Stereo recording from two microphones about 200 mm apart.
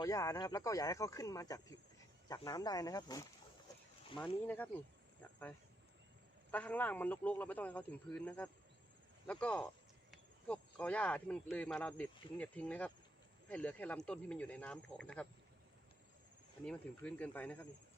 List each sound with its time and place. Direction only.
0.0 s a man's voice: 15° left (ahead or behind)
4.4 s a man's voice: 10° left (ahead or behind)
16.6 s a man's voice: 5° left (ahead or behind)